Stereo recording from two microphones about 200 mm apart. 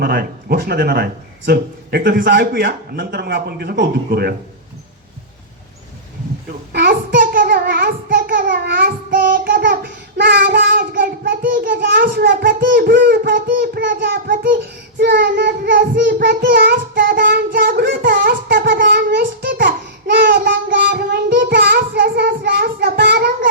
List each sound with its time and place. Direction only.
0.0 s a man's voice: 50° right (ahead or behind)
6.7 s child singing: 50° right (ahead or behind)
11.9 s a man's voice: 55° right (ahead or behind)
13.8 s a man's voice: 45° right (ahead or behind)
14.9 s child singing: 50° right (ahead or behind)